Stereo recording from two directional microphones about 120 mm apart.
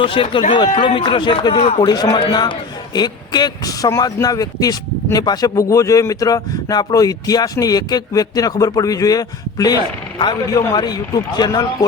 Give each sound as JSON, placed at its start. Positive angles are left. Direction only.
{"t": 0.0, "sound": "speech", "side_deg": 45}
{"t": 1.5, "sound": "a man's voice", "side_deg": 60}
{"t": 1.9, "sound": "speech", "side_deg": 35}